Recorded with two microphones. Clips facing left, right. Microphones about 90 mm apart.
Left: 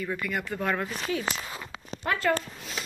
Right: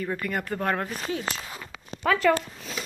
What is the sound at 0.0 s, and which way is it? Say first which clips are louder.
Speech: right 2 dB; 40° right (ahead or behind).